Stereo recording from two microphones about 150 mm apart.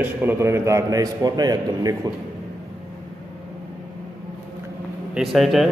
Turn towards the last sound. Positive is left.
turn(degrees=0)  # may be behind; listen again after turning